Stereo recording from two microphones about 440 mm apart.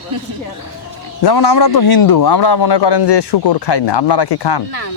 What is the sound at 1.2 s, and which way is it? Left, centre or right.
A man's voice, left.